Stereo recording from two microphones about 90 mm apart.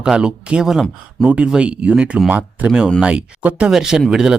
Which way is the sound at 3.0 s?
10° right (ahead or behind).